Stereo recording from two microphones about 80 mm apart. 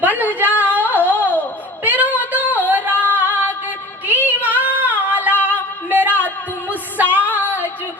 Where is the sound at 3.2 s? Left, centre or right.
Right.